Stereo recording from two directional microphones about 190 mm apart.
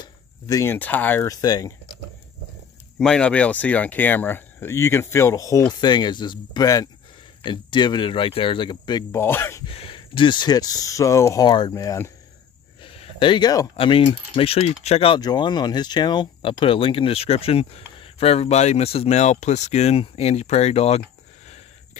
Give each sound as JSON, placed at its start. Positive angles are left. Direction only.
{"t": 0.0, "sound": "speech", "side_deg": 15}
{"t": 3.0, "sound": "speech", "side_deg": 5}
{"t": 9.7, "sound": "speech", "side_deg": 30}
{"t": 12.8, "sound": "speech", "side_deg": 30}